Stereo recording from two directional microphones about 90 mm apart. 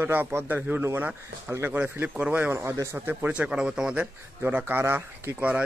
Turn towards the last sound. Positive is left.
turn(degrees=-15)  # may be behind; listen again after turning